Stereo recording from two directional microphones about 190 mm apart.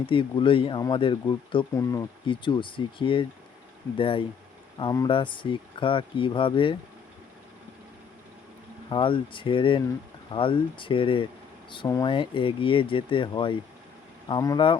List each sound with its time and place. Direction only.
0.0 s speech: 25° left (ahead or behind)
8.9 s speech: 25° left (ahead or behind)